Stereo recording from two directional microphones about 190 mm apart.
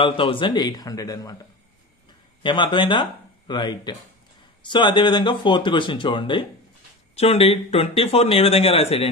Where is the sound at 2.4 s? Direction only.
25° left (ahead or behind).